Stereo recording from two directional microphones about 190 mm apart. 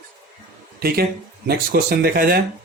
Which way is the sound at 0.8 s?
55° right (ahead or behind).